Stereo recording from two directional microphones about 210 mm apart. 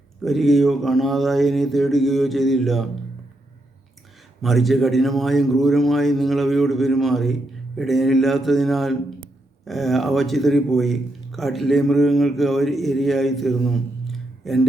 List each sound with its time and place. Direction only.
0.2 s a man's voice: centre (ahead or behind)
4.4 s a man's voice: centre (ahead or behind)